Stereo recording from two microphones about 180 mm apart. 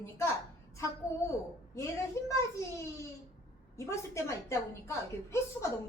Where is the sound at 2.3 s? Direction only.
15° left (ahead or behind).